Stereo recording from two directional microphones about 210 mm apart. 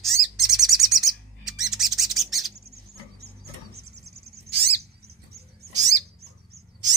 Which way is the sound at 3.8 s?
50° right (ahead or behind).